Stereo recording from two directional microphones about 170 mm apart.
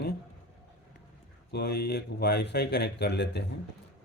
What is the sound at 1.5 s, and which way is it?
Speech, 70° left (ahead or behind).